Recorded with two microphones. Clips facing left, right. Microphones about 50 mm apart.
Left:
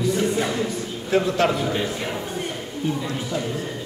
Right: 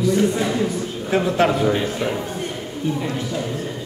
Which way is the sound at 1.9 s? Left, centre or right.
Centre.